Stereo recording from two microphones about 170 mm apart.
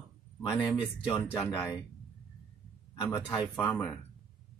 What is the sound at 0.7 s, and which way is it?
Speech, 25° left (ahead or behind).